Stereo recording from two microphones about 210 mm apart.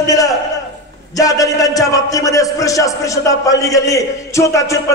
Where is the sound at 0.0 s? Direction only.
15° left (ahead or behind).